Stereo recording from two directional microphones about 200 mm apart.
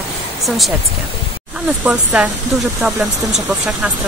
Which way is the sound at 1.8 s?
5° right (ahead or behind).